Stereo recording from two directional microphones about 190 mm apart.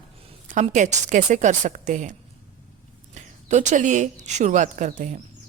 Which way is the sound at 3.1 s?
40° right (ahead or behind).